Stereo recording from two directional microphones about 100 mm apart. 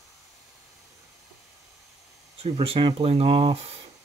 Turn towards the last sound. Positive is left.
turn(degrees=-65)  # may be behind; listen again after turning